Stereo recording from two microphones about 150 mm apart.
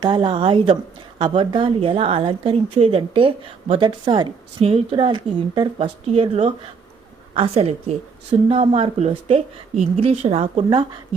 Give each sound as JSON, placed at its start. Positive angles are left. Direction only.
{"t": 0.0, "sound": "a woman's voice", "side_deg": -30}